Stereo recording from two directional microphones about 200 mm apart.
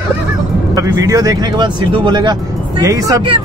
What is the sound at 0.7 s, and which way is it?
Speech, 15° right (ahead or behind).